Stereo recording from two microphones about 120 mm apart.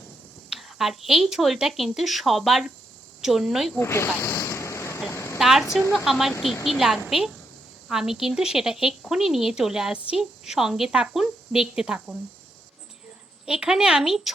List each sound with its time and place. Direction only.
0.5 s a woman's voice: centre (ahead or behind)
3.8 s speech: 20° left (ahead or behind)
4.2 s waves: 20° left (ahead or behind)
5.1 s a sound: 25° left (ahead or behind)
5.4 s a sound: 5° right (ahead or behind)
6.1 s speech: centre (ahead or behind)
13.4 s speech: 5° right (ahead or behind)